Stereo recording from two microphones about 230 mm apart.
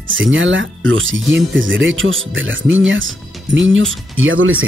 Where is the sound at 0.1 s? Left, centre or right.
Right.